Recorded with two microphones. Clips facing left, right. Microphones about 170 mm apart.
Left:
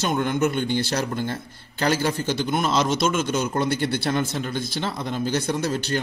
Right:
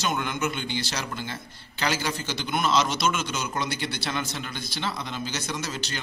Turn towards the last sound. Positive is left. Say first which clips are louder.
# left 8 dB
turn(degrees=55)  # may be behind; listen again after turning